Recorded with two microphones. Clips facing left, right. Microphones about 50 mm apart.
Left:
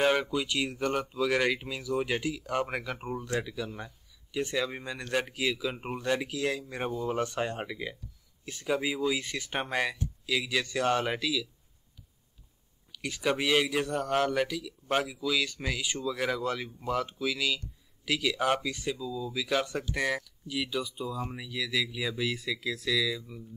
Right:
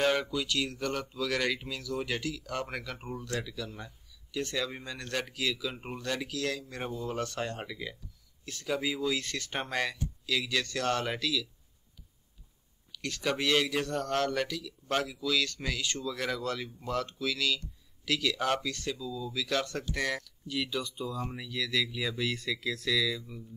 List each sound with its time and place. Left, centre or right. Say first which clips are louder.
0.0 s speech: left 2 dB; centre
12.9 s speech: left 2 dB; centre